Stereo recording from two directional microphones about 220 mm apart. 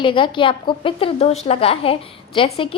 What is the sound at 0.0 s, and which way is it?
A woman's voice, 20° left (ahead or behind).